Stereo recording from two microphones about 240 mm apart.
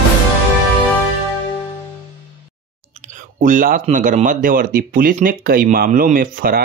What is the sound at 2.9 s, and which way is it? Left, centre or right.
Speech, right.